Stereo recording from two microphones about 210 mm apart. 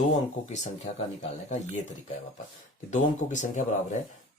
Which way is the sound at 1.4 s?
35° left (ahead or behind).